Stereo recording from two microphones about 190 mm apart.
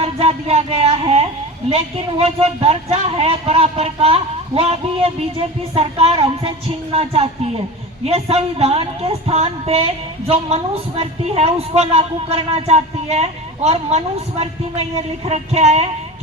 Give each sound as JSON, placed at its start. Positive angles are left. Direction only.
{"t": 0.0, "sound": "speech", "side_deg": -30}